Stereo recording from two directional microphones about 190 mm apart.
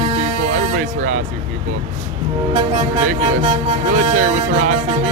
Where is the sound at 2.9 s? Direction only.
40° right (ahead or behind).